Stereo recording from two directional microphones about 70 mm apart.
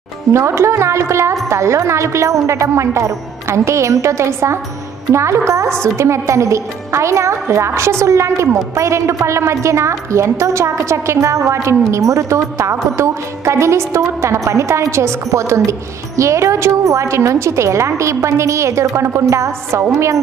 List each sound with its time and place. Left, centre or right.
0.3 s a woman's voice: right